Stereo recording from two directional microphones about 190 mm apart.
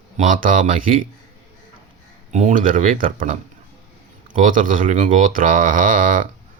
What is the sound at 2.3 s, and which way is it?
Speech, 45° right (ahead or behind).